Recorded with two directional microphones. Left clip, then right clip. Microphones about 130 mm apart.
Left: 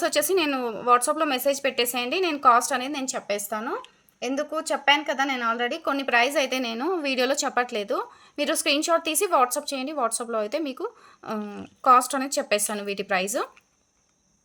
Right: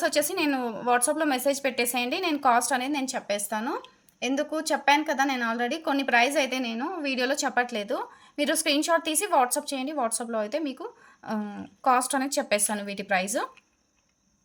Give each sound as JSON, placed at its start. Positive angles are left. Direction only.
{"t": 0.0, "sound": "a woman's voice", "side_deg": 30}